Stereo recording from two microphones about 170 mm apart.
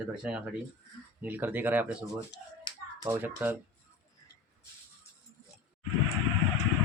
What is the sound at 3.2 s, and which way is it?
Speech, 10° right (ahead or behind).